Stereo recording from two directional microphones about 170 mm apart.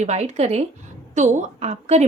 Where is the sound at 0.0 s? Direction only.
40° right (ahead or behind).